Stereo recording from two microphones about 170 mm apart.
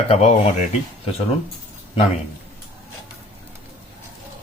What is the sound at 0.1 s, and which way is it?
Speech, 40° left (ahead or behind).